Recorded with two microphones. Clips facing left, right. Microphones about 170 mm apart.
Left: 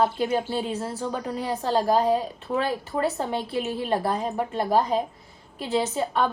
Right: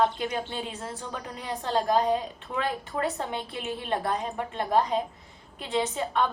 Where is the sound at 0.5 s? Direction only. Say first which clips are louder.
Left 7 dB; 35° left (ahead or behind).